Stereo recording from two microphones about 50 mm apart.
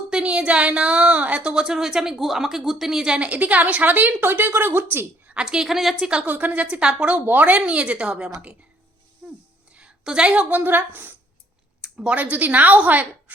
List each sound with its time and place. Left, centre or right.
0.1 s a woman's voice: right
1.5 s speech: centre
3.2 s a woman's voice: right
4.2 s speech: right
5.3 s speech: centre
6.2 s a woman's voice: right
7.3 s a woman's voice: right
9.2 s a sound: right
10.0 s a woman's voice: centre
10.5 s a woman's voice: right
11.8 s a sound: centre
12.1 s a woman's voice: right